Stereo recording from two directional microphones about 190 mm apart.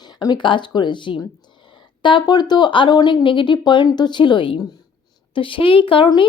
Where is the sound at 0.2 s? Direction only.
20° left (ahead or behind).